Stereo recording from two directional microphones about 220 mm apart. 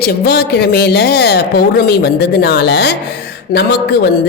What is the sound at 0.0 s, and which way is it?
A woman's voice, 45° left (ahead or behind).